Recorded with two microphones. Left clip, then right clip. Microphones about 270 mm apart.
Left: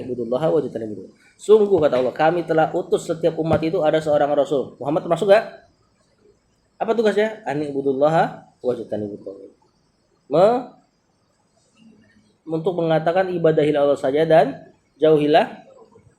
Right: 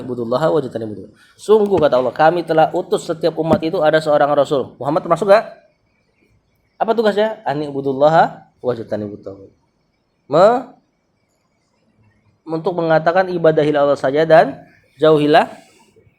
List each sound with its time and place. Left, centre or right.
0.3 s speech: right
6.7 s speech: right
10.2 s speech: right
12.5 s speech: right
14.9 s speech: right